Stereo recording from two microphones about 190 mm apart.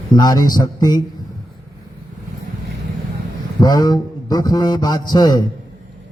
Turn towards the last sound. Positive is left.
turn(degrees=20)  # may be behind; listen again after turning